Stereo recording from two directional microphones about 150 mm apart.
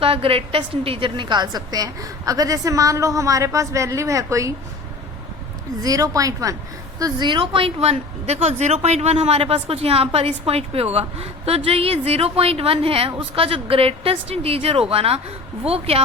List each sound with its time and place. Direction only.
0.0 s a woman's voice: 40° right (ahead or behind); by 4.5 s 20° right (ahead or behind)
5.8 s a woman's voice: 25° right (ahead or behind); by 16.0 s 40° right (ahead or behind)